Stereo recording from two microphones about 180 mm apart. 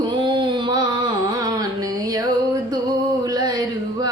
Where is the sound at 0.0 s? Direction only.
25° right (ahead or behind).